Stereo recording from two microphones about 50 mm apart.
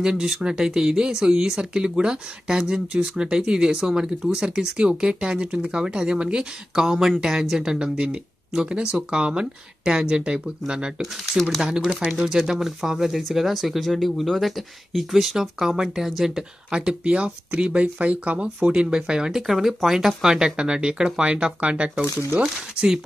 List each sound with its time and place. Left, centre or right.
0.0 s speech: centre
16.7 s speech: centre
19.4 s speech: centre; by 22.0 s right
22.4 s speech: centre